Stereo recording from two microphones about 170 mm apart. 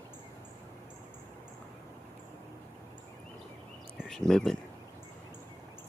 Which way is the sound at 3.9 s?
Centre (ahead or behind).